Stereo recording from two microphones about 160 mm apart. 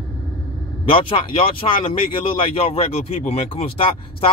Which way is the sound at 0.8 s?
35° left (ahead or behind).